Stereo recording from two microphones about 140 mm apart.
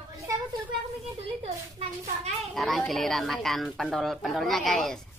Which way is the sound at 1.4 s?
50° right (ahead or behind).